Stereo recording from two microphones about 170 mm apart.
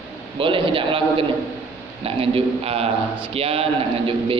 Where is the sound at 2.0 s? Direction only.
35° right (ahead or behind).